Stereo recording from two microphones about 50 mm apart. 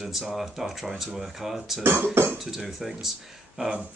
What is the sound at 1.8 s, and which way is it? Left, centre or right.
Speech, right.